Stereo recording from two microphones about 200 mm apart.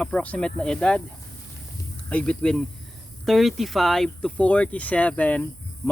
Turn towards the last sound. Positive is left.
turn(degrees=10)  # may be behind; listen again after turning